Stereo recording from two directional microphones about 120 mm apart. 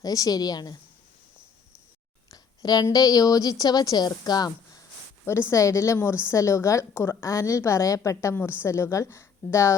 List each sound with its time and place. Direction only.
0.0 s a woman's voice: 30° left (ahead or behind)
2.3 s a woman's voice: 30° left (ahead or behind)